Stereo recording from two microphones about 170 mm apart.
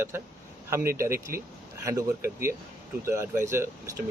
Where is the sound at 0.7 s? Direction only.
15° right (ahead or behind).